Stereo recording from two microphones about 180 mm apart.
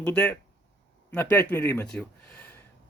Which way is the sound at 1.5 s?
10° left (ahead or behind).